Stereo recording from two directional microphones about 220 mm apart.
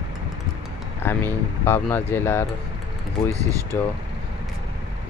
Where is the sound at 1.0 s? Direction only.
10° left (ahead or behind).